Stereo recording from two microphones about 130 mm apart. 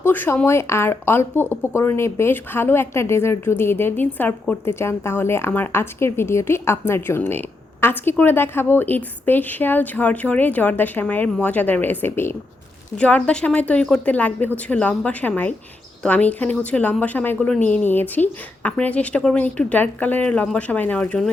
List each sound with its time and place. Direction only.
0.0 s speech: 15° left (ahead or behind)